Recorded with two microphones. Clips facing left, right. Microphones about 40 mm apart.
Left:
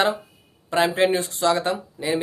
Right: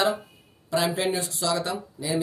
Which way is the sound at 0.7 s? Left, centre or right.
Left.